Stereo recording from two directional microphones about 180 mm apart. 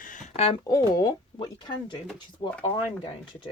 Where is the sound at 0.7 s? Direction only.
20° left (ahead or behind).